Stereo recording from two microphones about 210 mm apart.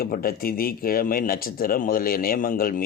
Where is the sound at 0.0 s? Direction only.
45° left (ahead or behind).